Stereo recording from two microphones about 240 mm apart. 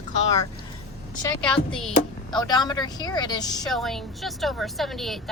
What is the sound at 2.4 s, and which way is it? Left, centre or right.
A woman's voice, centre.